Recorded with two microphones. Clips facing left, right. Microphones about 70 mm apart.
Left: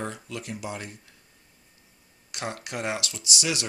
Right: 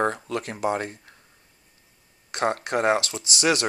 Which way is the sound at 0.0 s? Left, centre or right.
Right.